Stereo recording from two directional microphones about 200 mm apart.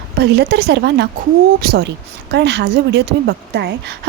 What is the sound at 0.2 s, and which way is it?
A woman's voice, 55° right (ahead or behind).